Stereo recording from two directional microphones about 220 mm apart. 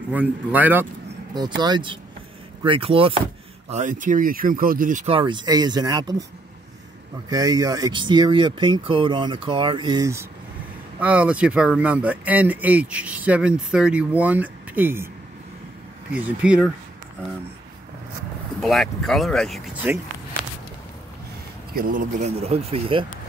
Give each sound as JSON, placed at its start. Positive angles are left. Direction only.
{"t": 0.1, "sound": "speech", "side_deg": -5}
{"t": 1.3, "sound": "speech", "side_deg": -20}
{"t": 3.7, "sound": "speech", "side_deg": -35}
{"t": 7.2, "sound": "speech", "side_deg": -15}
{"t": 16.3, "sound": "speech", "side_deg": -5}
{"t": 18.6, "sound": "speech", "side_deg": 0}
{"t": 21.7, "sound": "speech", "side_deg": -40}